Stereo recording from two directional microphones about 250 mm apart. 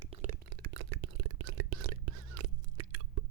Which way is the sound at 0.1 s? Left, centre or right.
Right.